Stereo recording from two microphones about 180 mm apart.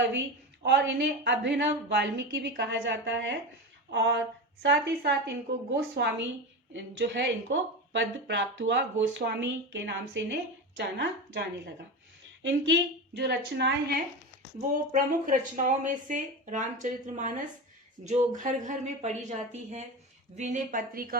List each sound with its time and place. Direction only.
0.6 s a woman's voice: 70° right (ahead or behind); by 4.2 s 90° right
4.6 s a woman's voice: 75° right (ahead or behind)
12.4 s speech: 90° right; by 14.0 s 70° right (ahead or behind)
14.9 s speech: 45° right (ahead or behind)